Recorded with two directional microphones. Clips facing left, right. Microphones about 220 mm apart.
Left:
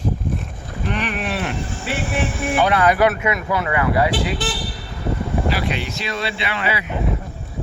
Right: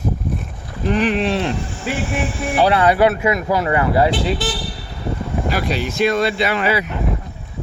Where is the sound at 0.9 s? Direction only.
35° right (ahead or behind).